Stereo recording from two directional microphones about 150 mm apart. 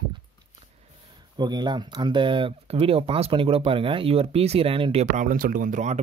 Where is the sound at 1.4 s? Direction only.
30° right (ahead or behind).